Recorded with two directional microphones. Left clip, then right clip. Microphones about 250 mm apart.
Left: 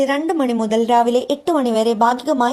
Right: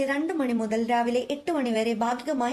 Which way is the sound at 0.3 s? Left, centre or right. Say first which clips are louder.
Left 9 dB; left.